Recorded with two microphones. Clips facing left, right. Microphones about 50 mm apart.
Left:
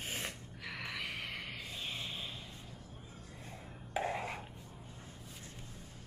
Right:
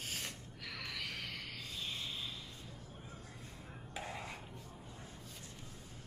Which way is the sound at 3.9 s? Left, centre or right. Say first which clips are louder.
Left 8 dB; left.